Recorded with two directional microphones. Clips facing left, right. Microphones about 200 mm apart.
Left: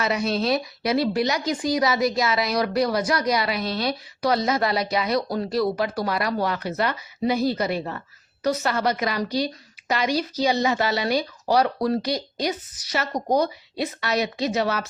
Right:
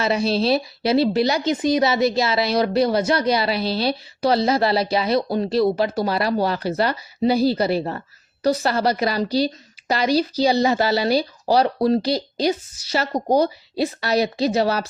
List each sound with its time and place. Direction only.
0.0 s a woman's voice: 30° right (ahead or behind)